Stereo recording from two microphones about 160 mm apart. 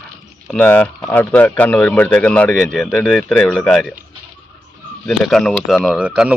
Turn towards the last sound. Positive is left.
turn(degrees=-5)  # may be behind; listen again after turning